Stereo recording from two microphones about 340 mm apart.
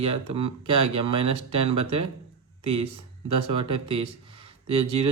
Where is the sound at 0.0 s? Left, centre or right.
Right.